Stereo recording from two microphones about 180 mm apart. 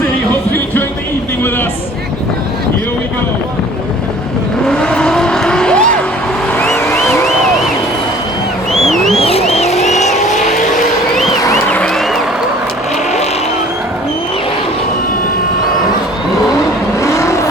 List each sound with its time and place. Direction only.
0.5 s music: 10° left (ahead or behind)
4.6 s vehicle: 5° left (ahead or behind)
6.9 s a sound: centre (ahead or behind)
8.7 s vehicle: centre (ahead or behind)
9.1 s vehicle: 35° left (ahead or behind)
11.4 s a sound: 5° left (ahead or behind)
17.0 s vehicle: 15° left (ahead or behind)